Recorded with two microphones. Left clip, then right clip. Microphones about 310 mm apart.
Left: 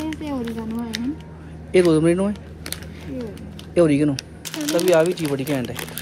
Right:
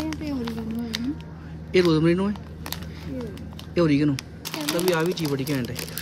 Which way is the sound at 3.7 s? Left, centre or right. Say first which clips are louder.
Left 4 dB; centre.